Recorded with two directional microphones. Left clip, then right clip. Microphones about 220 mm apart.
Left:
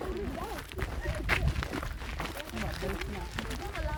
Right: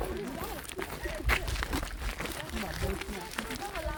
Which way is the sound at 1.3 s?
15° right (ahead or behind).